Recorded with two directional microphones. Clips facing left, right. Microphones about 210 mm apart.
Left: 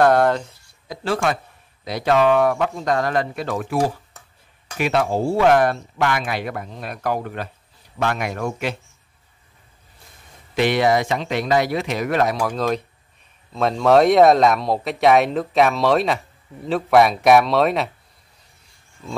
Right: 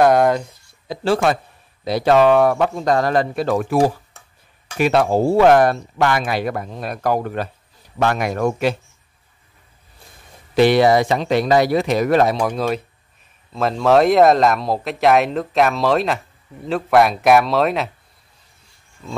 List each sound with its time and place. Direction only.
0.0 s speech: 10° right (ahead or behind)
0.8 s speech: 30° right (ahead or behind)
4.7 s speech: 40° right (ahead or behind)
10.5 s speech: 35° right (ahead or behind)
12.4 s speech: 20° right (ahead or behind)
13.5 s speech: centre (ahead or behind)